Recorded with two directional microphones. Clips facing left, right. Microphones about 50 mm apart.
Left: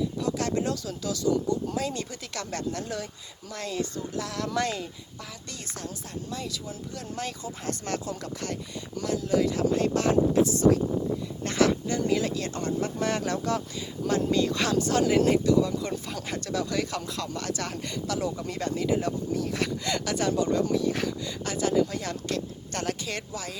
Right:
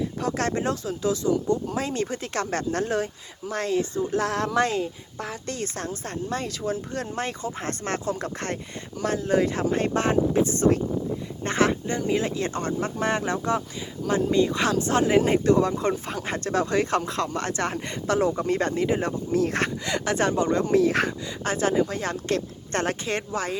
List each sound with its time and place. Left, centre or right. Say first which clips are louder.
0.2 s speech: right 4 dB; right
19.8 s speech: right 3 dB; right
20.1 s speech: right 2 dB; right
20.7 s speech: right 6 dB; right
21.4 s speech: right 2 dB; right